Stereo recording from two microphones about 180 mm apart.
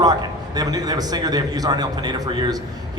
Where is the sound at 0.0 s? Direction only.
20° right (ahead or behind).